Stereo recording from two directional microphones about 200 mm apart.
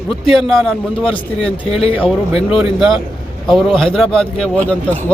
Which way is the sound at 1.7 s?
30° left (ahead or behind).